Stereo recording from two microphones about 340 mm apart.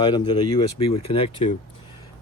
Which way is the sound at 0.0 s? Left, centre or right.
Centre.